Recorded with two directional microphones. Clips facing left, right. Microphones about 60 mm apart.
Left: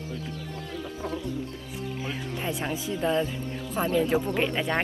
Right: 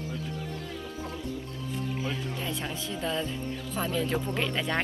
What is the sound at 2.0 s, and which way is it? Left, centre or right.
Speech, left.